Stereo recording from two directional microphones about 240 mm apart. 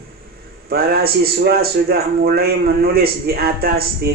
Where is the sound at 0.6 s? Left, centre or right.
Right.